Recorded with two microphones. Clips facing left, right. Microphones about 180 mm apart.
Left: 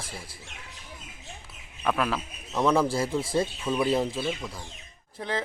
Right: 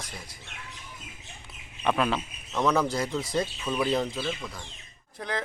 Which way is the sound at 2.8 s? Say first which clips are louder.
Left 2 dB; 30° left (ahead or behind).